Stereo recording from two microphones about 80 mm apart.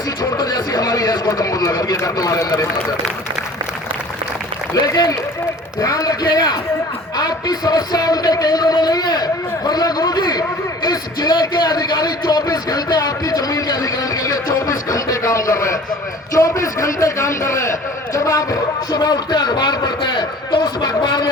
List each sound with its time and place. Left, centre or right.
0.2 s a sound: left
1.3 s a man's voice: left
5.8 s a man's voice: left
6.2 s a man's voice: left